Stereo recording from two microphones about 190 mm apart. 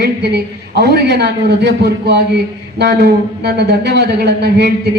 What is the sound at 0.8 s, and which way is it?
A man's voice, 60° right (ahead or behind).